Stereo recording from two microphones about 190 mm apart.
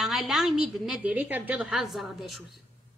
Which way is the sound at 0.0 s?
Centre (ahead or behind).